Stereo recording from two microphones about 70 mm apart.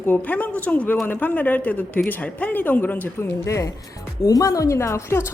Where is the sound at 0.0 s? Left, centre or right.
Left.